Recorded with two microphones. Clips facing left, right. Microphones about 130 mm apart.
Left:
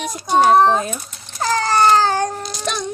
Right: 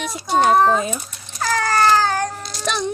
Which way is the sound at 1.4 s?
30° left (ahead or behind).